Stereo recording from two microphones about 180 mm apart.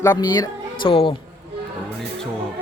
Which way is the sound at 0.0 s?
20° left (ahead or behind).